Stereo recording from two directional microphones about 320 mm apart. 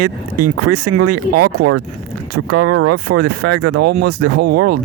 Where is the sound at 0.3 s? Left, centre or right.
Right.